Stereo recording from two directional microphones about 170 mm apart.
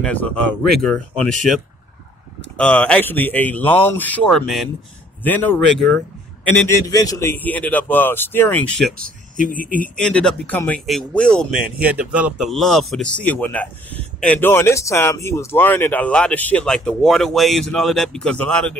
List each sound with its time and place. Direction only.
0.0 s speech: 10° left (ahead or behind)
2.5 s speech: 5° left (ahead or behind)
5.8 s speech: 5° left (ahead or behind)
6.9 s speech: 20° left (ahead or behind)
8.9 s speech: 55° right (ahead or behind)
9.5 s speech: 55° left (ahead or behind)
9.8 s speech: 5° left (ahead or behind)
11.5 s speech: 10° right (ahead or behind)